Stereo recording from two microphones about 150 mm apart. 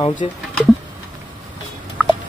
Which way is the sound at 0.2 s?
40° left (ahead or behind).